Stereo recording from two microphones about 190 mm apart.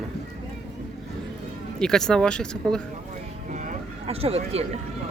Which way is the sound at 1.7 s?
5° left (ahead or behind).